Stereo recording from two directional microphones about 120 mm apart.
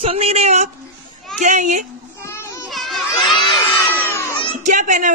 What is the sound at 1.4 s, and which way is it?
Speech, 90° right.